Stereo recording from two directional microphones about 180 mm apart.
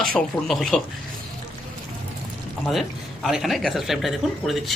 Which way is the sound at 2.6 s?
Centre (ahead or behind).